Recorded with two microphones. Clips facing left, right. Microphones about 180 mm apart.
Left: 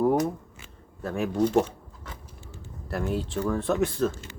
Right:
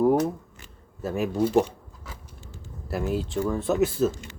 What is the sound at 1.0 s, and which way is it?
Speech, 5° right (ahead or behind).